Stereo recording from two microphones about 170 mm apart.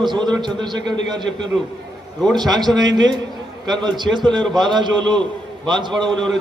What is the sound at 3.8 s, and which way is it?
A man's voice, 25° right (ahead or behind).